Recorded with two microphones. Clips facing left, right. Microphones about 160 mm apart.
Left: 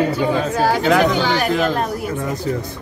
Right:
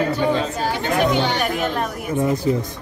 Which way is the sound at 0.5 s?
90° left.